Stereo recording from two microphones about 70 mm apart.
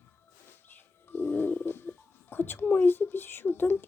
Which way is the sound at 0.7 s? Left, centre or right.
Left.